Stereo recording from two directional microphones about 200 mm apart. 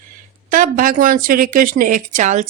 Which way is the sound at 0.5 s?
45° right (ahead or behind).